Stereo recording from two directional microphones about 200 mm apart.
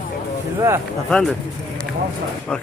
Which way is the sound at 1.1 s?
Centre (ahead or behind).